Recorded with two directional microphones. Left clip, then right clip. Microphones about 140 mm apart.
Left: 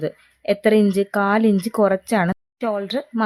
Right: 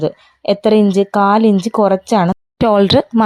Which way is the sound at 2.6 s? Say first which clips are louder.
Right 13 dB; 80° right.